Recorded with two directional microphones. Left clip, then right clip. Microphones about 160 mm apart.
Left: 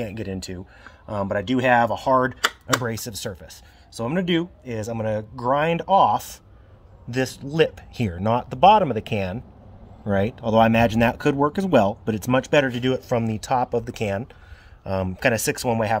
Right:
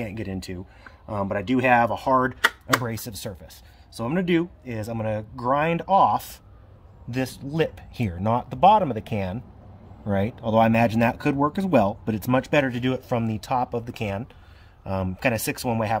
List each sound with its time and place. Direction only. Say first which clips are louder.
0.0 s speech: left 2 dB; 30° left (ahead or behind)